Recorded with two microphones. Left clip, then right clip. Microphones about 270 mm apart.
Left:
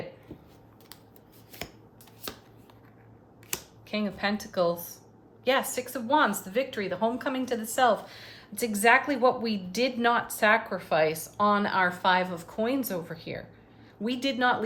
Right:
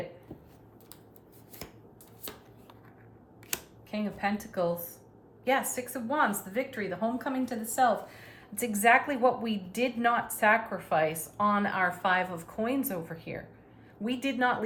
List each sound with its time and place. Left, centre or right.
3.5 s a sound: centre
3.8 s a woman's voice: centre
8.4 s a woman's voice: centre